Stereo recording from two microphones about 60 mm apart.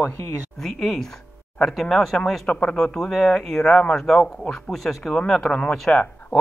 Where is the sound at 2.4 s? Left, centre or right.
Centre.